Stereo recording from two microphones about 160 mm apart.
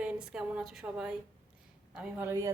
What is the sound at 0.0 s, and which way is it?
A woman's voice, 5° right (ahead or behind).